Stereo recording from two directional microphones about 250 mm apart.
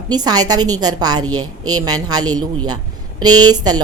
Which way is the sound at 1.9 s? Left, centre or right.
Centre.